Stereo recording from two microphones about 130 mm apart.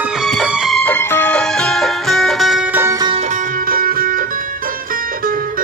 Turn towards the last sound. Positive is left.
turn(degrees=-90)